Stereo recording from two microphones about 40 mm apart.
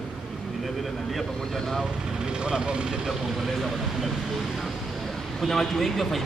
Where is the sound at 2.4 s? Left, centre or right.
Right.